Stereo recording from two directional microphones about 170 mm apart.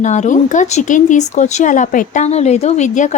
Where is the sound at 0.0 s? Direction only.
45° left (ahead or behind).